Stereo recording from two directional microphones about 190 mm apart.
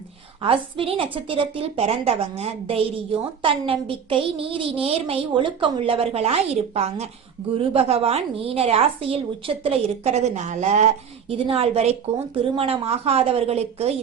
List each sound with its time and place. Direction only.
0.4 s a woman's voice: 30° right (ahead or behind)